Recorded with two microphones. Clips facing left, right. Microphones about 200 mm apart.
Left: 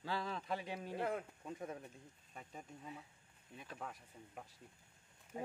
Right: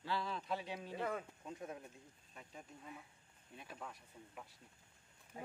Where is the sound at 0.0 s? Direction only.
45° left (ahead or behind).